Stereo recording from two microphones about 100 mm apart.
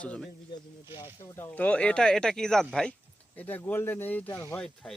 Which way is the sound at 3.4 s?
20° left (ahead or behind).